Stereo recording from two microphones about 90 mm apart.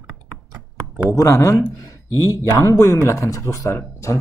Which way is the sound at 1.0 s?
35° left (ahead or behind).